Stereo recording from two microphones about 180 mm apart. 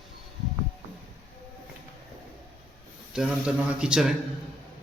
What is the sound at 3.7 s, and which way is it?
Speech, 5° right (ahead or behind).